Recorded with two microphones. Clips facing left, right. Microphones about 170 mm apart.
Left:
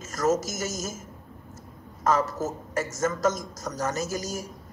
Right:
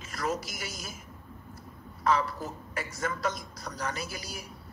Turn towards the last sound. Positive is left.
turn(degrees=45)  # may be behind; listen again after turning